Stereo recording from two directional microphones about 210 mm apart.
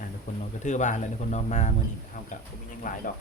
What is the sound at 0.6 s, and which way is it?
Speech, 35° left (ahead or behind).